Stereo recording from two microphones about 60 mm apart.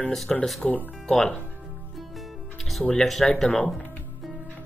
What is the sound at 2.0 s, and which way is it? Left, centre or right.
Music, centre.